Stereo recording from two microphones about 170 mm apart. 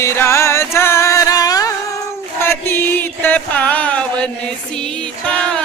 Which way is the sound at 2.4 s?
15° left (ahead or behind).